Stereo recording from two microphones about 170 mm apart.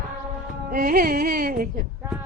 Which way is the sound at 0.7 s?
55° right (ahead or behind).